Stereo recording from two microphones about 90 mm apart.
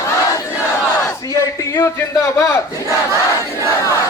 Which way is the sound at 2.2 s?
30° left (ahead or behind).